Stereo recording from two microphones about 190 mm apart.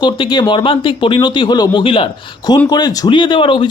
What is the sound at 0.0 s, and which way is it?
Speech, 25° left (ahead or behind).